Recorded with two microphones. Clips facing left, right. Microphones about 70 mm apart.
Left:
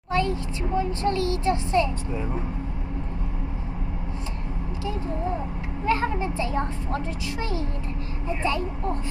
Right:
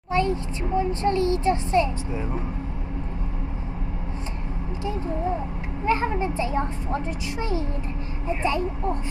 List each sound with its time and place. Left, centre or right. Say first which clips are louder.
0.1 s a child's voice: right 1 dB; right
5.9 s a child's voice: right 1 dB; right
8.4 s a child's voice: right 2 dB; centre